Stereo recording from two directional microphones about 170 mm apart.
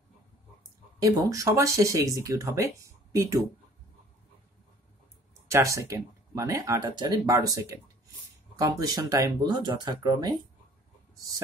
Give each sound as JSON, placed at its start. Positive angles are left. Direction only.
{"t": 0.9, "sound": "speech", "side_deg": -20}
{"t": 5.5, "sound": "speech", "side_deg": -15}